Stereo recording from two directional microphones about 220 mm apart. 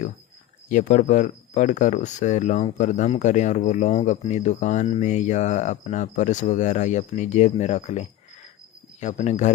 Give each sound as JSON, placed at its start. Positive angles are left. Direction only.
{"t": 0.7, "sound": "speech", "side_deg": 35}